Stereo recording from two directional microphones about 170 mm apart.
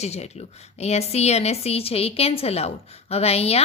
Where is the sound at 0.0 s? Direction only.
40° left (ahead or behind).